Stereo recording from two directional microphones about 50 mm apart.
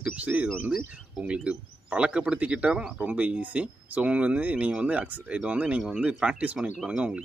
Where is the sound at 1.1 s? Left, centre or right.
Right.